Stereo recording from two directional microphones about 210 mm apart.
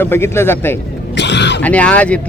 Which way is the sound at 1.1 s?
55° left (ahead or behind).